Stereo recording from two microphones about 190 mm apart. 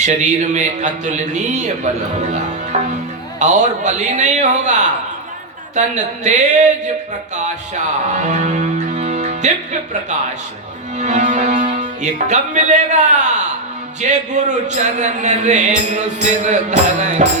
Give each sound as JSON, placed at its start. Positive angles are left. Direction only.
{"t": 0.0, "sound": "a man's voice", "side_deg": -40}
{"t": 8.1, "sound": "music", "side_deg": -40}
{"t": 11.0, "sound": "music", "side_deg": -40}
{"t": 14.1, "sound": "a man's voice", "side_deg": -40}